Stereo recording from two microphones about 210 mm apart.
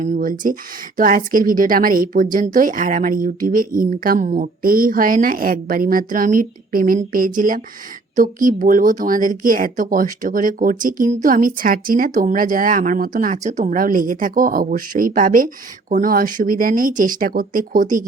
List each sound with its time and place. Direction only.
0.0 s speech: 40° right (ahead or behind)